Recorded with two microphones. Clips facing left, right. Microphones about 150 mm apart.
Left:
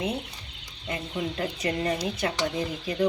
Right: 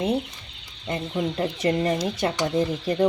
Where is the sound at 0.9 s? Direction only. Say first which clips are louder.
Right 5 dB; 30° right (ahead or behind).